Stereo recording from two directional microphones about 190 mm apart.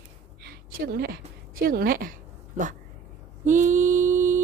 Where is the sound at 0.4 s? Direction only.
55° right (ahead or behind).